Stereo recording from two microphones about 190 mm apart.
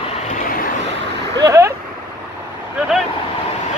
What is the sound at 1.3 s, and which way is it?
Speech, 15° right (ahead or behind).